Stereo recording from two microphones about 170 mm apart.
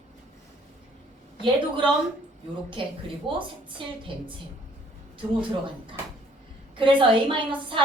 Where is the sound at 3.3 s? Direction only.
30° right (ahead or behind).